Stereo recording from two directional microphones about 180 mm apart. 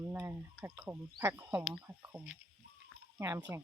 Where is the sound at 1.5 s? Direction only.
5° right (ahead or behind).